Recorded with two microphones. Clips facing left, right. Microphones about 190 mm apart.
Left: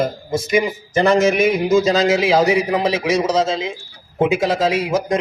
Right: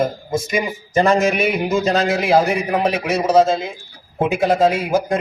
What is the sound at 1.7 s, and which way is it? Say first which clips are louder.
A man's voice: left 4 dB; 90° left.